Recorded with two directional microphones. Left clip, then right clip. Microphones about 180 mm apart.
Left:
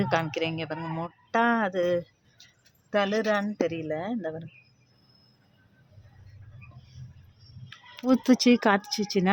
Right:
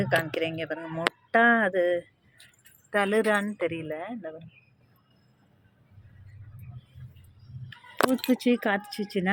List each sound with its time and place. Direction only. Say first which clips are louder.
0.0 s speech: right 1 dB; 15° left (ahead or behind)
2.9 s speech: right 1 dB; centre (ahead or behind)
3.6 s speech: left 2 dB; 10° left (ahead or behind)
3.9 s speech: left 4 dB; 25° left (ahead or behind)
7.7 s speech: right 1 dB; 30° left (ahead or behind)